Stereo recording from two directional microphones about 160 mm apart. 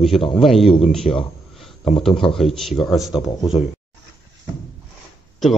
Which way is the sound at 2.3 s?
Centre (ahead or behind).